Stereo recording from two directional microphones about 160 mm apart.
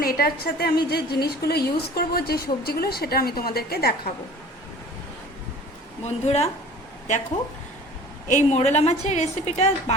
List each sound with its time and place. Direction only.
0.0 s a woman's voice: 65° left (ahead or behind)
6.1 s a woman's voice: 45° left (ahead or behind)
8.3 s a woman's voice: 45° left (ahead or behind)